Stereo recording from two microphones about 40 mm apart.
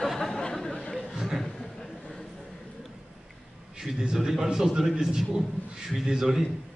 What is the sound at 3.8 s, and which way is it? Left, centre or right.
A man's voice, centre.